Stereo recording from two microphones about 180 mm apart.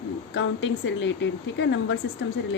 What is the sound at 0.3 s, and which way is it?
A woman's voice, 90° left.